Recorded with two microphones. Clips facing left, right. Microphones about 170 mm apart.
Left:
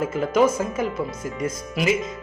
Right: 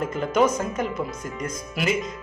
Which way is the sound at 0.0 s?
5° left (ahead or behind).